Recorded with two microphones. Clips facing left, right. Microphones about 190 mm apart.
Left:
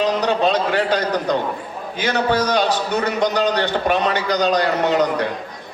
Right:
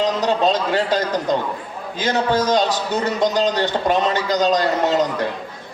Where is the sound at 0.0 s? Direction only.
60° left (ahead or behind).